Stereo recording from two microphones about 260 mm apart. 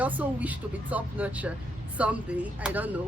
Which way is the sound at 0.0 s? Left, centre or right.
Centre.